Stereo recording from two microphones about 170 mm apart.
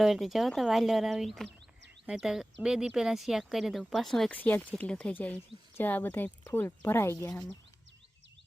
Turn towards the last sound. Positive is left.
turn(degrees=15)  # may be behind; listen again after turning